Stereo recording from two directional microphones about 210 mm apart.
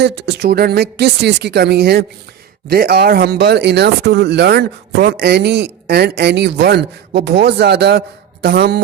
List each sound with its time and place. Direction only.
0.0 s speech: 55° right (ahead or behind)